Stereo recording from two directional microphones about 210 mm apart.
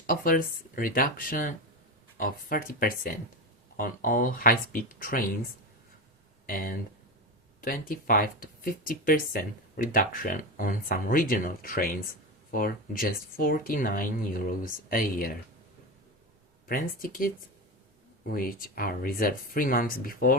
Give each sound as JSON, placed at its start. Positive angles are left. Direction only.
{"t": 0.1, "sound": "speech", "side_deg": 40}
{"t": 6.5, "sound": "speech", "side_deg": 45}
{"t": 16.6, "sound": "speech", "side_deg": 40}